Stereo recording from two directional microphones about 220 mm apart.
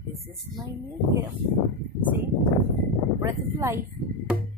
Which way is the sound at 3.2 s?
10° right (ahead or behind).